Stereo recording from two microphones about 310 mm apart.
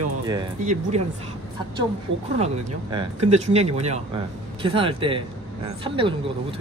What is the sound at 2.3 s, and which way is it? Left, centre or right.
Speech, centre.